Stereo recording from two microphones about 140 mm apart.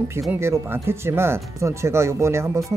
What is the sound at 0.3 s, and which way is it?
Speech, 15° right (ahead or behind).